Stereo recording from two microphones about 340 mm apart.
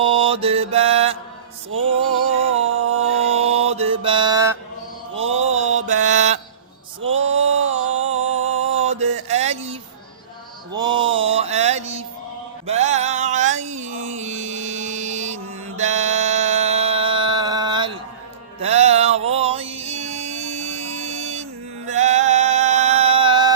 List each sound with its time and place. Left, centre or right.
0.0 s mantra: centre
2.5 s mantra: right
3.6 s mantra: centre
7.2 s a sound: centre
8.6 s mantra: centre
9.3 s a sound: centre
10.8 s mantra: centre
12.6 s a sound: centre
18.6 s music: centre